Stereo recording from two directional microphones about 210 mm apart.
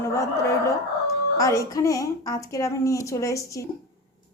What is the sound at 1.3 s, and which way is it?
A woman's voice, 15° left (ahead or behind).